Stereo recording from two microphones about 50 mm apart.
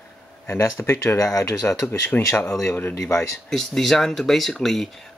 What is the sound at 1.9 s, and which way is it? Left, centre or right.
Speech, left.